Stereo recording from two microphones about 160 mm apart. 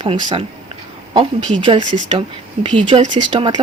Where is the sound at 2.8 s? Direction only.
30° right (ahead or behind).